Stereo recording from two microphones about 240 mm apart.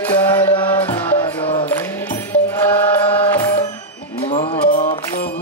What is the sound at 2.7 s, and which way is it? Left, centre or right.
Music, centre.